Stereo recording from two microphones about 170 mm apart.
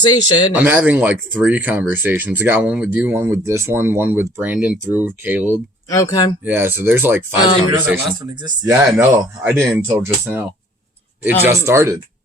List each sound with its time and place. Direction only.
0.0 s speech: 25° left (ahead or behind)
0.5 s speech: 10° right (ahead or behind)
5.9 s speech: 20° left (ahead or behind)
6.4 s speech: 10° right (ahead or behind)
8.4 s speech: 25° right (ahead or behind)
9.0 s speech: 15° right (ahead or behind)
11.4 s speech: 15° right (ahead or behind)